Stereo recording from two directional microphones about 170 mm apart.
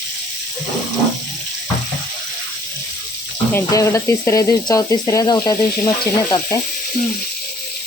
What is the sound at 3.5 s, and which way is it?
Speech, 20° left (ahead or behind).